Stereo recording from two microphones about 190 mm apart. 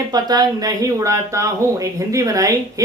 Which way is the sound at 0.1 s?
20° right (ahead or behind).